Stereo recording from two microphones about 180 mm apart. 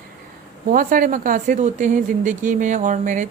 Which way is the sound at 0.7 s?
50° right (ahead or behind).